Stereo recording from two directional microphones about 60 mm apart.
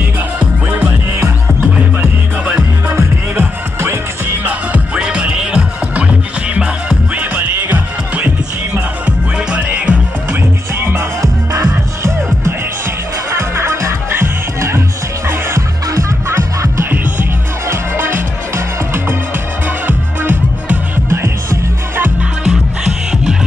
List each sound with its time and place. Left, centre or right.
0.7 s music: right
2.9 s music: right
4.5 s music: right
10.8 s music: right
13.4 s music: right
16.9 s music: right
19.9 s music: right
21.1 s music: right